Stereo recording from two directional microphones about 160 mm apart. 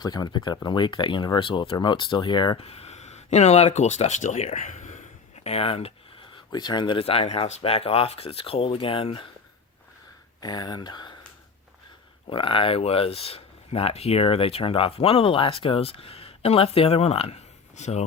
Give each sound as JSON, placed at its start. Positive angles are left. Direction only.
{"t": 0.0, "sound": "speech", "side_deg": 25}
{"t": 10.4, "sound": "speech", "side_deg": 25}
{"t": 12.3, "sound": "speech", "side_deg": 30}